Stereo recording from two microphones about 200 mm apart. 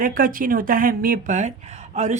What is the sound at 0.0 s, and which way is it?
Speech, 45° right (ahead or behind).